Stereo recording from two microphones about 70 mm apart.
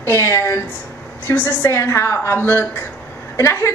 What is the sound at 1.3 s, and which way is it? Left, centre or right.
A woman's voice, left.